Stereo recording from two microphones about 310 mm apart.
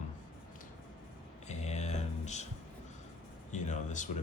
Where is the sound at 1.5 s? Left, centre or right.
Left.